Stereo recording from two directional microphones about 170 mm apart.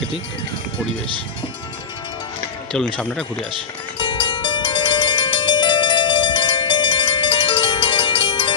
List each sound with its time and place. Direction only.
2.7 s speech: 5° left (ahead or behind)
4.0 s music: 25° left (ahead or behind)